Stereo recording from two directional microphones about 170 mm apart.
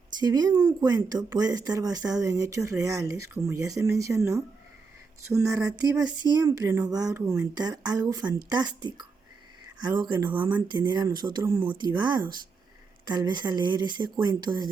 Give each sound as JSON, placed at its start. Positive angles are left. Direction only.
{"t": 0.2, "sound": "speech", "side_deg": -25}